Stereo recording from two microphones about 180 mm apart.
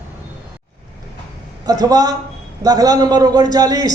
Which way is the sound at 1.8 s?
20° right (ahead or behind).